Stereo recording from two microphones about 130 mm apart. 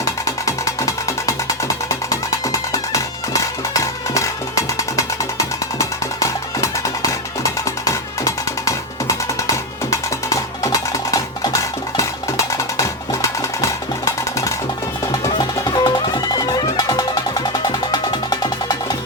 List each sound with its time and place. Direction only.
0.0 s music: 25° left (ahead or behind)
9.9 s music: 25° left (ahead or behind)